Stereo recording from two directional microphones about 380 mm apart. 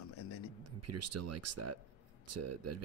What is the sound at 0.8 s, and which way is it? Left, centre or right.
Speech, right.